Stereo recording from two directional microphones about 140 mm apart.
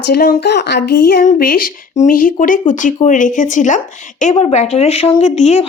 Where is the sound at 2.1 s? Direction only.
80° left.